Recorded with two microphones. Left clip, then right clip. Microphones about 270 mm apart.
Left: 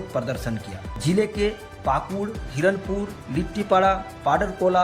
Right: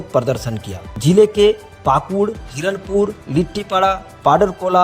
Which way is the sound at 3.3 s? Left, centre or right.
Right.